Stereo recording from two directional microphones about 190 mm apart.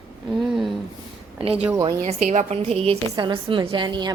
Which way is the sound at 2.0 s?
40° right (ahead or behind).